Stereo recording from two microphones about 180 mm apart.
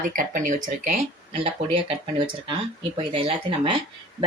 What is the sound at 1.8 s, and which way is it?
Speech, 30° right (ahead or behind).